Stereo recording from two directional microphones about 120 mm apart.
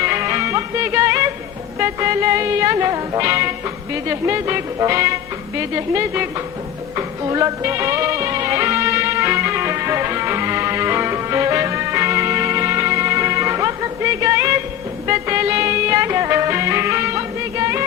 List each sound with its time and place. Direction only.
0.0 s music: 25° right (ahead or behind)